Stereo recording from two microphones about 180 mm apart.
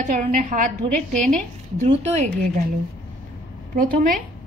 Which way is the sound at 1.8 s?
35° right (ahead or behind).